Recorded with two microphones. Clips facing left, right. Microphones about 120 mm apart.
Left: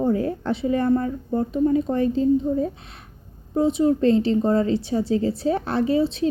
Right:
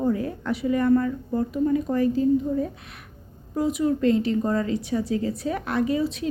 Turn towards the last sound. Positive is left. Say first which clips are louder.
# left 4 dB
turn(degrees=30)  # may be behind; listen again after turning